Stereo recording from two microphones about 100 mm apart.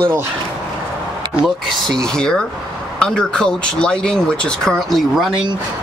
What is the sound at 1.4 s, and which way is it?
Speech, centre (ahead or behind).